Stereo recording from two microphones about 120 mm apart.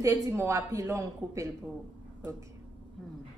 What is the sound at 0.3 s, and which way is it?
A man's voice, 25° right (ahead or behind).